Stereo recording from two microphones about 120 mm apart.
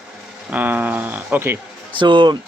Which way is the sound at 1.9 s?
40° right (ahead or behind).